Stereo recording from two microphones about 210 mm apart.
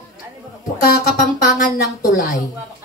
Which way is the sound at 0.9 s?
45° left (ahead or behind).